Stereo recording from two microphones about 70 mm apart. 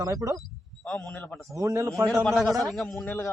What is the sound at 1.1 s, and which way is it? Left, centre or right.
Speech, left.